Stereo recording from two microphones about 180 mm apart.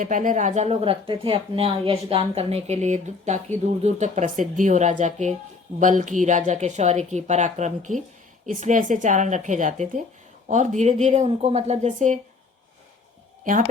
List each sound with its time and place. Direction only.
0.0 s a woman's voice: 45° right (ahead or behind)
13.4 s speech: 50° right (ahead or behind)